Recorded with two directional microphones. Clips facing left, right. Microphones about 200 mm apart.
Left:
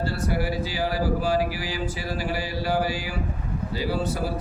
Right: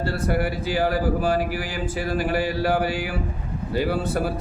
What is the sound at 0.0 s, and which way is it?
Speech, 55° right (ahead or behind).